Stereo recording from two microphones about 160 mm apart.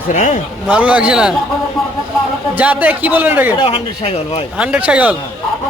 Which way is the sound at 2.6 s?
10° right (ahead or behind).